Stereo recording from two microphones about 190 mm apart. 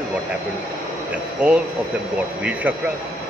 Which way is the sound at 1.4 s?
5° right (ahead or behind).